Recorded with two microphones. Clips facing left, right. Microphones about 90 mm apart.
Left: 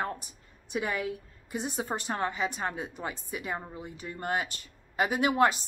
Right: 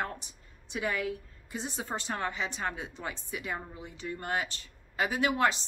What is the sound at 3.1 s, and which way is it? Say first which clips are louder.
A woman's voice: left 2 dB; 45° left (ahead or behind).